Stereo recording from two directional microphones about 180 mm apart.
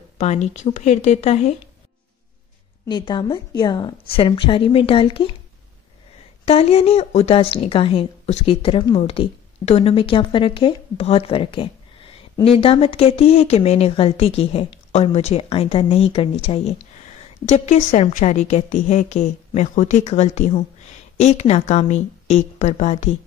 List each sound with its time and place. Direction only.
0.2 s a woman's voice: 40° left (ahead or behind)
2.9 s a woman's voice: 25° left (ahead or behind)
6.4 s a woman's voice: 35° left (ahead or behind)